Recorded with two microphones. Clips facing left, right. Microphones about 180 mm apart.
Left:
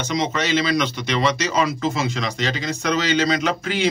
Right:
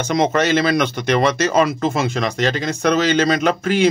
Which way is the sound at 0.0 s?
50° right (ahead or behind).